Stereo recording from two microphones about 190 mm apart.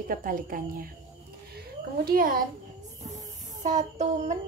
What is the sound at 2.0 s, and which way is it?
Speech, 50° right (ahead or behind).